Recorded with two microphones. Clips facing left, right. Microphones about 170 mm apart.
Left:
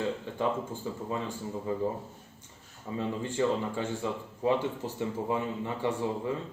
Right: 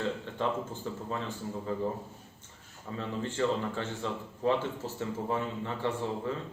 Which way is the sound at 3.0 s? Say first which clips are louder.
Left 2 dB; 15° left (ahead or behind).